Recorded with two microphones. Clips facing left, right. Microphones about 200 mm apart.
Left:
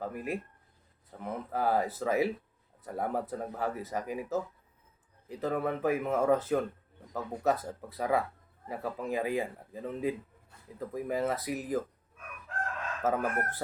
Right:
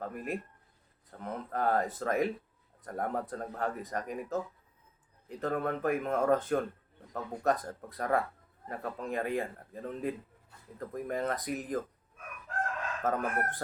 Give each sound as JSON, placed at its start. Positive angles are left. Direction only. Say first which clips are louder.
{"t": 0.0, "sound": "speech", "louder": "left 1 dB", "side_deg": 5}
{"t": 13.0, "sound": "speech", "louder": "left 2 dB", "side_deg": 5}